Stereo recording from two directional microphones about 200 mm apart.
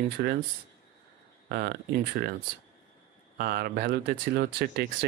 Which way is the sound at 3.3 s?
50° right (ahead or behind).